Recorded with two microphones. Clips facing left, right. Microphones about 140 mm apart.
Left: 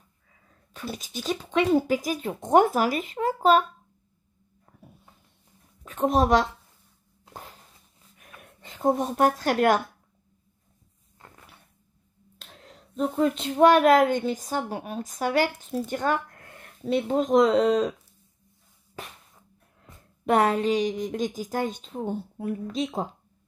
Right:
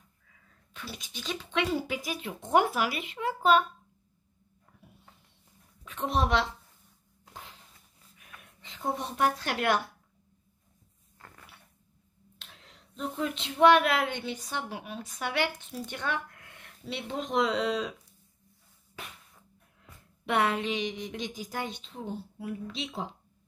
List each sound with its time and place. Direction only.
0.3 s speech: 45° left (ahead or behind)
5.9 s a woman's voice: 45° left (ahead or behind)
7.3 s a sound: 45° left (ahead or behind)
8.3 s speech: 45° left (ahead or behind)
11.1 s a sound: 20° left (ahead or behind)
12.4 s speech: 45° left (ahead or behind)
20.2 s a woman's voice: 40° left (ahead or behind)